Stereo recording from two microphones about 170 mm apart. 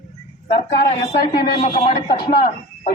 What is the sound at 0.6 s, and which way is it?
Speech, 40° left (ahead or behind).